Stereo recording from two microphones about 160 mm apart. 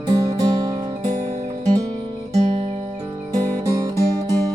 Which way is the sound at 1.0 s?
45° right (ahead or behind).